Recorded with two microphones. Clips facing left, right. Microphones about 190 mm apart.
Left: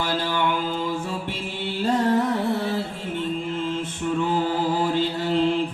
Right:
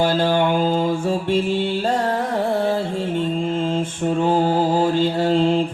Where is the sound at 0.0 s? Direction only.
50° right (ahead or behind).